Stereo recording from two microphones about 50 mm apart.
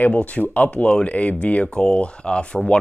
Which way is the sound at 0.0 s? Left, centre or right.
Left.